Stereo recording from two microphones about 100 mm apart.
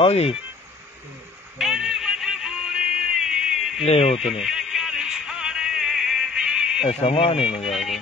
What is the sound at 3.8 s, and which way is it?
Speech, 90° left.